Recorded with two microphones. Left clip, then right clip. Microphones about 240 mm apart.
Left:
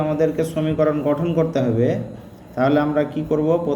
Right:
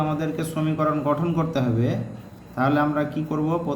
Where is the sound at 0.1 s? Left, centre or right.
Centre.